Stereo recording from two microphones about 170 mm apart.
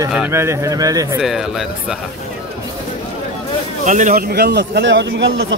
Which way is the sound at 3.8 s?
45° right (ahead or behind).